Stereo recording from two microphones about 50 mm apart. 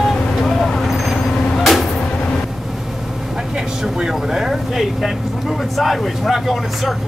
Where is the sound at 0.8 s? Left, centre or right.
Centre.